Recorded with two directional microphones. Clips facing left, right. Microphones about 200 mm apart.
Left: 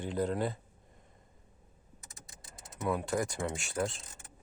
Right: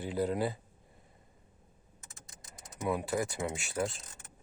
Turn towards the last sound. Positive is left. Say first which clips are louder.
# even
turn(degrees=0)  # may be behind; listen again after turning